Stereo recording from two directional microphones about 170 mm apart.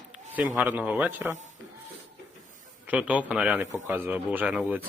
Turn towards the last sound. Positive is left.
turn(degrees=-10)  # may be behind; listen again after turning